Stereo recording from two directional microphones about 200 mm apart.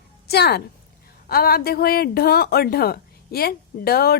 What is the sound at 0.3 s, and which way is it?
A woman's voice, 50° left (ahead or behind).